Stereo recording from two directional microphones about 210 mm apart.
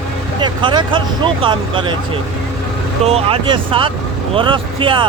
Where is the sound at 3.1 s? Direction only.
30° right (ahead or behind).